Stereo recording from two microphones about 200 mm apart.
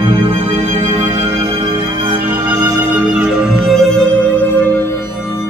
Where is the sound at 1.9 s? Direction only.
25° right (ahead or behind).